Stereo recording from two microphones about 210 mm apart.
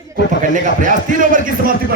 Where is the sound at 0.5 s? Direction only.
35° right (ahead or behind).